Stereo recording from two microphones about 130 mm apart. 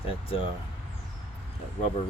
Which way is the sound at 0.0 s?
45° left (ahead or behind).